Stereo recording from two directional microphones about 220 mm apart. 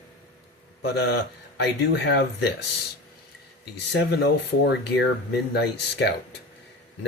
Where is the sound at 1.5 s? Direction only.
50° left (ahead or behind).